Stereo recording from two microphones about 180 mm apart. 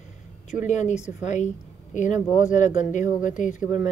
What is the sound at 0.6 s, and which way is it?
Speech, 40° left (ahead or behind).